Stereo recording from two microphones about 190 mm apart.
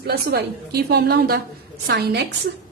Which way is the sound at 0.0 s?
55° right (ahead or behind).